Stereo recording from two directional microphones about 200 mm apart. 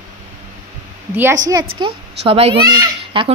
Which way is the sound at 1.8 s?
25° right (ahead or behind).